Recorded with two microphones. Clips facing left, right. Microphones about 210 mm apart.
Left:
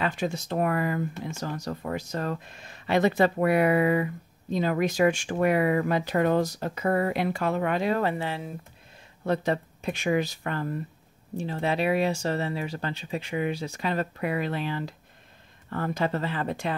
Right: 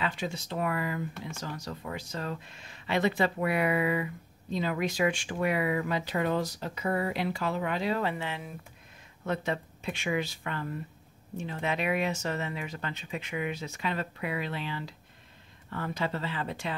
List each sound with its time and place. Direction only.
0.0 s speech: 45° left (ahead or behind)